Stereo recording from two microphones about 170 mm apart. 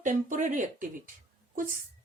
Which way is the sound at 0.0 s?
50° right (ahead or behind).